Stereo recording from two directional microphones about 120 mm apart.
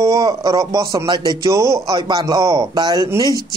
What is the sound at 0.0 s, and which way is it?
Speech, 30° right (ahead or behind).